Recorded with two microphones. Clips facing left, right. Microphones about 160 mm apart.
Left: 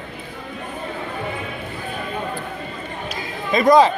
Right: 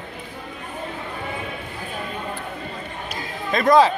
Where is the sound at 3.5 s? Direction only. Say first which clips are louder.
Left 2 dB; centre (ahead or behind).